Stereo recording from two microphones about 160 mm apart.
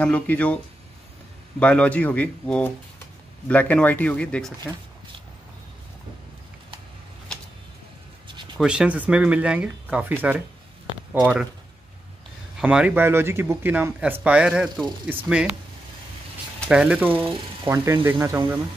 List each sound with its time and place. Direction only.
0.0 s speech: 10° left (ahead or behind)
1.6 s speech: 10° left (ahead or behind)
8.5 s speech: 5° right (ahead or behind)
12.5 s speech: 5° right (ahead or behind)
16.7 s speech: 5° right (ahead or behind)
17.6 s speech: 15° right (ahead or behind)